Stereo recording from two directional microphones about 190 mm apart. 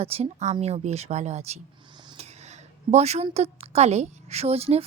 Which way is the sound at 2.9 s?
35° right (ahead or behind).